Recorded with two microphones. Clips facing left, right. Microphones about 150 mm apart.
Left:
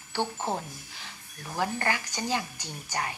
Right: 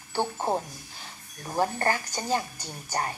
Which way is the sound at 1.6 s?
40° right (ahead or behind).